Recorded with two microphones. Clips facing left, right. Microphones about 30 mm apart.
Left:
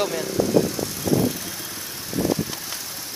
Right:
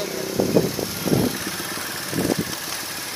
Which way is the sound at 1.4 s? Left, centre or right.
Right.